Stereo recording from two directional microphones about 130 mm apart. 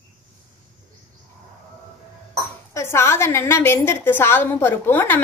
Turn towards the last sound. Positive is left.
turn(degrees=15)  # may be behind; listen again after turning